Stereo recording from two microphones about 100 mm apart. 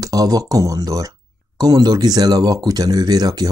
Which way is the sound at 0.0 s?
35° right (ahead or behind).